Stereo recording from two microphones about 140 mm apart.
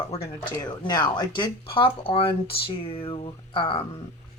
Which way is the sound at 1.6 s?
40° left (ahead or behind).